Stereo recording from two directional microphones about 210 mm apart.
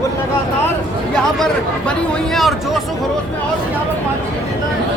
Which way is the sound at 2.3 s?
Centre (ahead or behind).